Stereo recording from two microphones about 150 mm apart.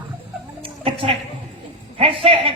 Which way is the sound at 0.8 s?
35° right (ahead or behind).